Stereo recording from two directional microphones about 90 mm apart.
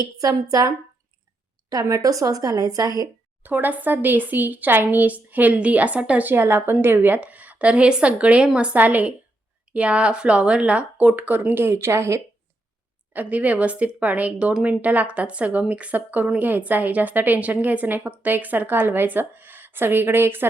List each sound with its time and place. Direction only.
0.2 s a woman's voice: 45° right (ahead or behind)
1.7 s a woman's voice: 40° right (ahead or behind)
3.4 s speech: 20° right (ahead or behind)
13.1 s speech: 20° right (ahead or behind)